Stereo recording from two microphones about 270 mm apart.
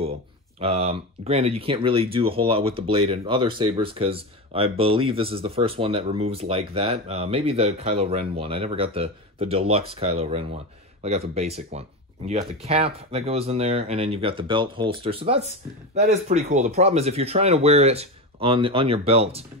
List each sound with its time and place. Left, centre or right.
0.6 s speech: right